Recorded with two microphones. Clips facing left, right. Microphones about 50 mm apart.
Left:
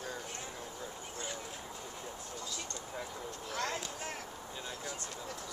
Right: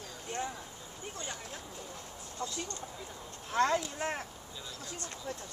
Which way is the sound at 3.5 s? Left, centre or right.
Right.